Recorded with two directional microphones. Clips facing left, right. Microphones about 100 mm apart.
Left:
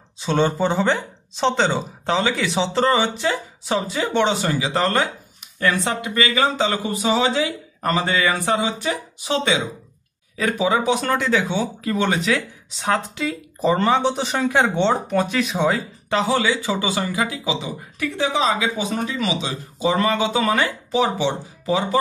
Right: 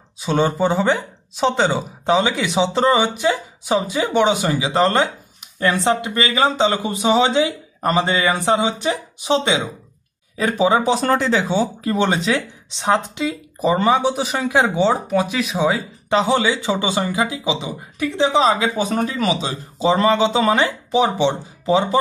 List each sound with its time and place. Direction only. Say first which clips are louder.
0.2 s speech: right 1 dB; 10° right (ahead or behind)
16.1 s speech: right 3 dB; 20° right (ahead or behind); by 19.5 s 45° right (ahead or behind)
19.8 s speech: right 4 dB; 25° right (ahead or behind)